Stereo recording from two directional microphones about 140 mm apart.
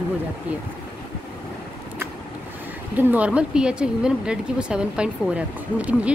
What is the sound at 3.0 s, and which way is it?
A woman's voice, 10° right (ahead or behind).